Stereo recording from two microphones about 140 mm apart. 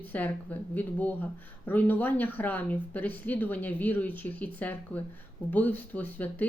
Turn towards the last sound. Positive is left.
turn(degrees=15)  # may be behind; listen again after turning